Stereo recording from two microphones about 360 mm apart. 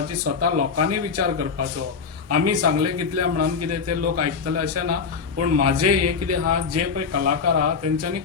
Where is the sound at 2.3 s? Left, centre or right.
Right.